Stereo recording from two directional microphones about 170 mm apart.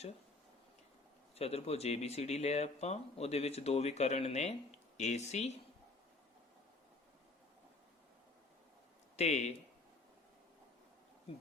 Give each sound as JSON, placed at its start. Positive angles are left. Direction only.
{"t": 1.4, "sound": "speech", "side_deg": 35}
{"t": 9.1, "sound": "speech", "side_deg": 40}